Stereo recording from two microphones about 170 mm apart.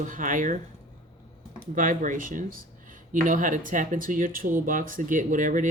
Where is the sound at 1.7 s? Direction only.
50° right (ahead or behind).